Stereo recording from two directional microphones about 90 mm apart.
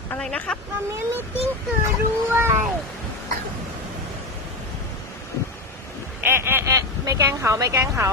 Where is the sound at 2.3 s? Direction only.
25° right (ahead or behind).